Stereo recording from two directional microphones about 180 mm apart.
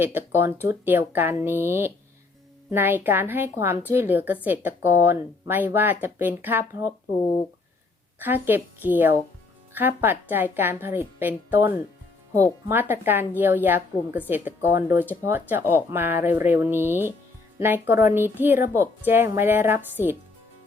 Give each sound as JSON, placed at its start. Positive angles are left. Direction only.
{"t": 0.0, "sound": "a woman's voice", "side_deg": -15}
{"t": 8.2, "sound": "a woman's voice", "side_deg": -10}